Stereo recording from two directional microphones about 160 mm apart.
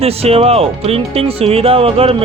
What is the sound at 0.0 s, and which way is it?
Speech, 40° right (ahead or behind).